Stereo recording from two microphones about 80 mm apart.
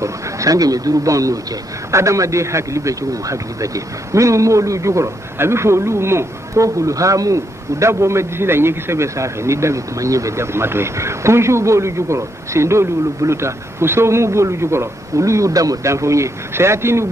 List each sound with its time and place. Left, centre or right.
0.0 s a man's voice: right